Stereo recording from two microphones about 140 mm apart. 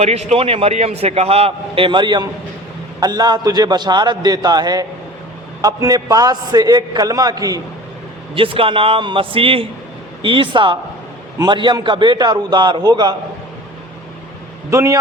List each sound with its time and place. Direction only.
0.0 s a man's voice: 50° right (ahead or behind); by 7.6 s 25° right (ahead or behind)
8.4 s a man's voice: 40° right (ahead or behind)
14.7 s a man's voice: 20° right (ahead or behind)